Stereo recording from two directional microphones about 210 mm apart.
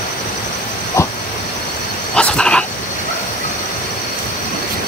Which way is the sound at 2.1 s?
5° left (ahead or behind).